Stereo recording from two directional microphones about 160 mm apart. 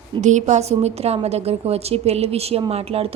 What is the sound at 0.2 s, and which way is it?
A woman's voice, 50° right (ahead or behind).